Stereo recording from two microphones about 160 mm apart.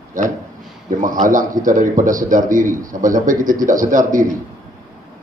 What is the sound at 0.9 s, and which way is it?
A man's voice, 55° right (ahead or behind).